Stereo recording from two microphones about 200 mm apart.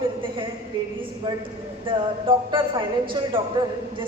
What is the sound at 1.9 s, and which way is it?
A woman's voice, 25° right (ahead or behind).